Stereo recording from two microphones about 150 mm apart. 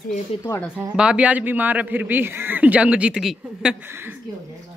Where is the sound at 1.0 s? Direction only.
5° right (ahead or behind).